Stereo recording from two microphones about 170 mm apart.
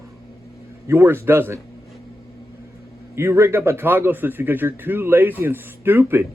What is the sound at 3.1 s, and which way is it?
A man's voice, 15° right (ahead or behind).